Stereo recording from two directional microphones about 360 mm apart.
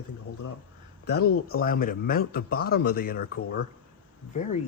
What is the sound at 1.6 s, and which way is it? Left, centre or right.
Speech, left.